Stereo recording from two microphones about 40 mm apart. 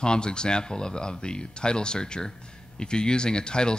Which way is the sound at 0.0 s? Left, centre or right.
Left.